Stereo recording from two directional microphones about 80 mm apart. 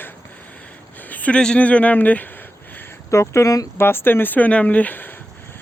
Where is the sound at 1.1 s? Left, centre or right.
Centre.